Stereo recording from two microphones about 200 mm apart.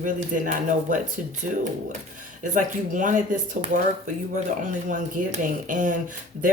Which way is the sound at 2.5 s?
40° right (ahead or behind).